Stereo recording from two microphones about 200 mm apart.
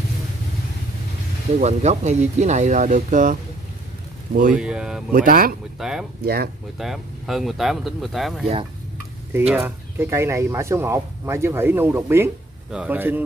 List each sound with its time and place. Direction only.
1.6 s speech: 35° right (ahead or behind)
4.6 s speech: 5° right (ahead or behind)
5.1 s speech: 45° right (ahead or behind)
5.8 s speech: centre (ahead or behind)
6.2 s speech: 50° right (ahead or behind)
6.8 s speech: centre (ahead or behind)
9.5 s speech: 10° right (ahead or behind)